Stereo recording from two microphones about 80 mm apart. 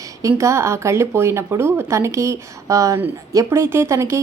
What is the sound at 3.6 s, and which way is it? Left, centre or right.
Speech, right.